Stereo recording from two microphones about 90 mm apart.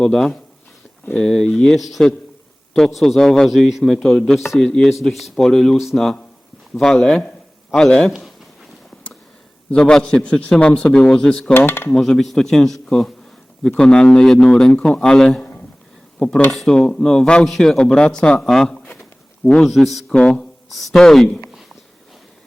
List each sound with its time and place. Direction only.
0.0 s a man's voice: 5° left (ahead or behind)
9.7 s a man's voice: 15° left (ahead or behind)
11.5 s dishes: 25° left (ahead or behind)
11.9 s a man's voice: 5° left (ahead or behind)
20.1 s a man's voice: 10° left (ahead or behind)
20.7 s a man's voice: centre (ahead or behind)